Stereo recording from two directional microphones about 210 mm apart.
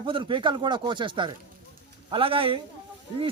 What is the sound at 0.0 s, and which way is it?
Speech, 25° right (ahead or behind).